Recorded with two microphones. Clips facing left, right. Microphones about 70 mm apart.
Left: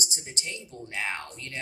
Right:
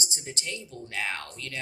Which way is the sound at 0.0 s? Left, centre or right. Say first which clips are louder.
Right 1 dB; left.